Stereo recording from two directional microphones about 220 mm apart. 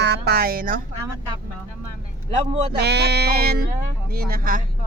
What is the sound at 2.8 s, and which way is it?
Speech, 50° right (ahead or behind).